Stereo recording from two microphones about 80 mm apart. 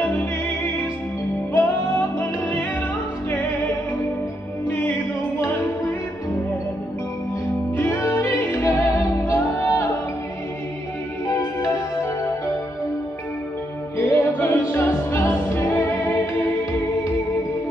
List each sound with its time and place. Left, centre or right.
1.5 s music: left
7.7 s music: left
11.2 s music: left
13.9 s music: left